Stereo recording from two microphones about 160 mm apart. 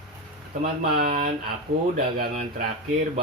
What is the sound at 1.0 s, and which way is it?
Speech, 60° right (ahead or behind).